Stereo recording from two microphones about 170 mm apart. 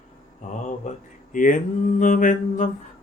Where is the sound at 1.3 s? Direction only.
50° left (ahead or behind).